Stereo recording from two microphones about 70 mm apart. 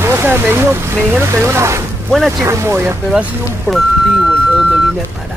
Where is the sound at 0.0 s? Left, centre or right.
Right.